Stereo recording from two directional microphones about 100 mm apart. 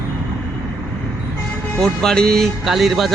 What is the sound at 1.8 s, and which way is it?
Speech, 5° left (ahead or behind).